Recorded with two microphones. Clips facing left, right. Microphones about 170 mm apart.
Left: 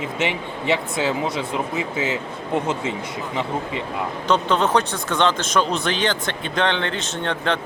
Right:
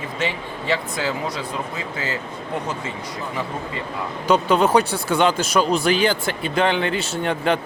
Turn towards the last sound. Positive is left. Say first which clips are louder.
# right 2 dB
turn(degrees=-10)  # may be behind; listen again after turning